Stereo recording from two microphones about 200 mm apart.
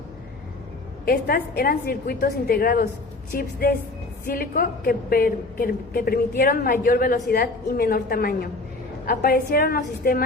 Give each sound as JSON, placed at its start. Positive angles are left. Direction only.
{"t": 1.0, "sound": "a woman's voice", "side_deg": 50}